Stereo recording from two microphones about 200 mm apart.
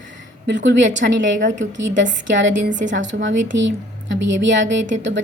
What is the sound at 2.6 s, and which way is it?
Speech, 40° right (ahead or behind).